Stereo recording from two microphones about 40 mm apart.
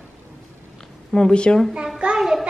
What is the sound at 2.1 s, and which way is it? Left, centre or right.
Speech, centre.